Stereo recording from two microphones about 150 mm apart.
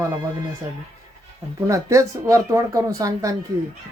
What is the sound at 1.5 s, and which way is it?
Speech, 20° right (ahead or behind).